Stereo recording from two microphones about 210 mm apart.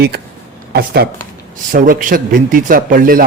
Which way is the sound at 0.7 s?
50° right (ahead or behind).